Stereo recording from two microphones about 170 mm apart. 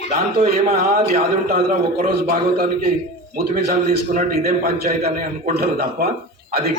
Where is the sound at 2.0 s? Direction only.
60° right (ahead or behind).